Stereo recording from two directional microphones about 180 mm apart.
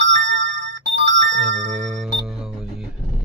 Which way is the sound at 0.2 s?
90° right.